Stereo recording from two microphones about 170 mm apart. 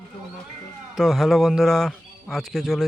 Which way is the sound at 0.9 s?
Centre (ahead or behind).